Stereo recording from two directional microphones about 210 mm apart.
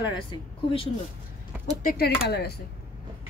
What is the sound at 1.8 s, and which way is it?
Speech, 45° left (ahead or behind).